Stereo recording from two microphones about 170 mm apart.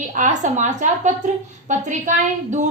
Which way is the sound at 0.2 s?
45° right (ahead or behind).